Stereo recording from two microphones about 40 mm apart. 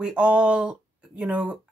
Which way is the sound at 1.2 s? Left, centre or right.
Right.